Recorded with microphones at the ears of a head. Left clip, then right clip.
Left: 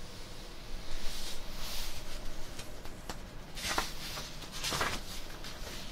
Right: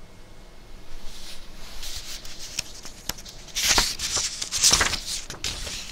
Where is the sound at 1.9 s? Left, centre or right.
Right.